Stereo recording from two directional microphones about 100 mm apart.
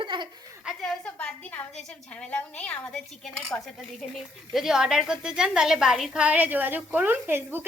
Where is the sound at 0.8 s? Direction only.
10° left (ahead or behind).